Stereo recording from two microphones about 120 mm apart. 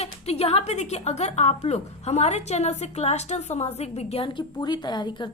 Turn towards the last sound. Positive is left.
turn(degrees=35)  # may be behind; listen again after turning